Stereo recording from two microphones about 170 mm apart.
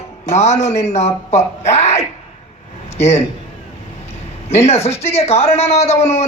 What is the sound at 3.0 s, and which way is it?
Speech, 40° left (ahead or behind).